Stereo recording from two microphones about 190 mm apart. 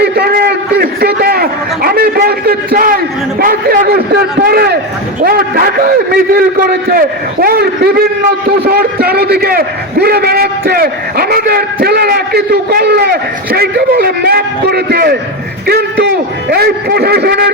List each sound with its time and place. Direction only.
0.0 s a man's voice: 55° right (ahead or behind)